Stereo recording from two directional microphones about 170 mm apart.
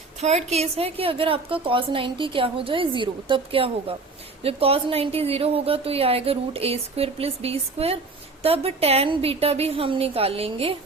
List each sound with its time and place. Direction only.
0.2 s a woman's voice: 40° right (ahead or behind)